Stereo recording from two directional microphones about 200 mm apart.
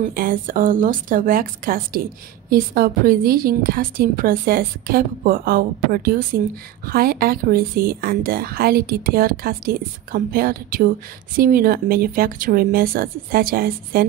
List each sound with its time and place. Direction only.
0.0 s a woman's voice: 45° right (ahead or behind)